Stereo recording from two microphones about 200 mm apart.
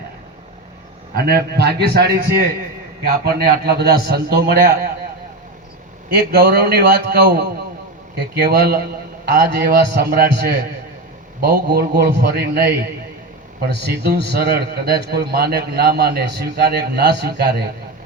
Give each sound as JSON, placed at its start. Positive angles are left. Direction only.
{"t": 1.1, "sound": "a man's voice", "side_deg": -50}
{"t": 6.1, "sound": "a man's voice", "side_deg": -55}